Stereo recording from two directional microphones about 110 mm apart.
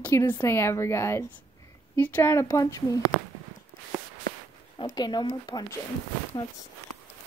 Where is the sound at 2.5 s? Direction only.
30° left (ahead or behind).